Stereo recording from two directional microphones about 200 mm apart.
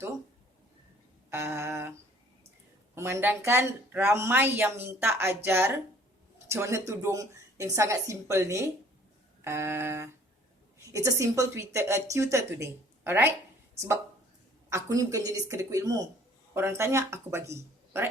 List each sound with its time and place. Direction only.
1.3 s a woman's voice: 15° right (ahead or behind)
2.9 s a woman's voice: 15° right (ahead or behind)
14.7 s a woman's voice: 15° right (ahead or behind)